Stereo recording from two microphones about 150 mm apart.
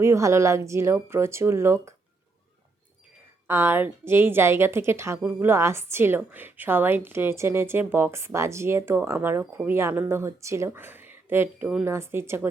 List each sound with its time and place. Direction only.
0.0 s speech: 20° right (ahead or behind)
3.4 s a woman's voice: 15° right (ahead or behind)